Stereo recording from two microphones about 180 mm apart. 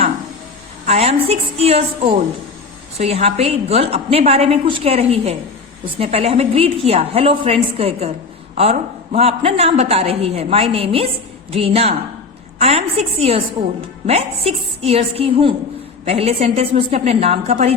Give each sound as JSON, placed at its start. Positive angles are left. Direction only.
{"t": 0.9, "sound": "a woman's voice", "side_deg": -35}
{"t": 9.1, "sound": "a woman's voice", "side_deg": -35}